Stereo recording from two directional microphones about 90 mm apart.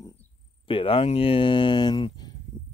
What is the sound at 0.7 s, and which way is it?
Speech, 85° left.